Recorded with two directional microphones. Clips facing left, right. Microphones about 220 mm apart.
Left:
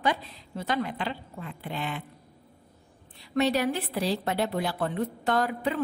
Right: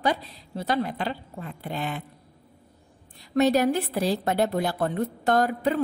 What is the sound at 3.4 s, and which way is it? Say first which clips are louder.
A woman's voice: right 4 dB; 45° right (ahead or behind).